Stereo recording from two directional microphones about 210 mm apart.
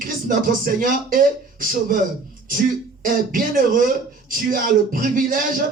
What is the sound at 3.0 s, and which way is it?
A man's voice, 40° right (ahead or behind).